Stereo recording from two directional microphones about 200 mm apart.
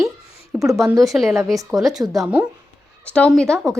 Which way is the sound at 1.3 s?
15° right (ahead or behind).